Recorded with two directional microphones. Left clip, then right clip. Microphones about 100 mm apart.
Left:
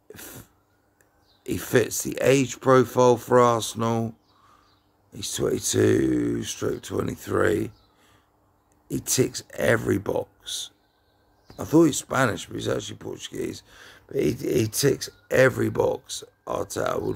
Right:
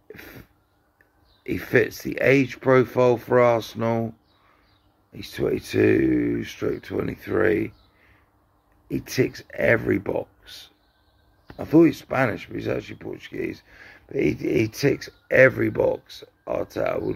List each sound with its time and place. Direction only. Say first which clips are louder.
0.1 s cough: right 1 dB; 25° left (ahead or behind)
1.4 s speech: right 2 dB; 30° left (ahead or behind)
5.1 s speech: right 1 dB; 25° left (ahead or behind)
8.8 s speech: even; 30° left (ahead or behind)